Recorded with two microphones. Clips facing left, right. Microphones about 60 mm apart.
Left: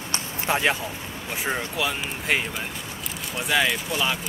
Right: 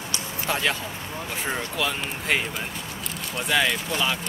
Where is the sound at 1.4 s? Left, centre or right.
Centre.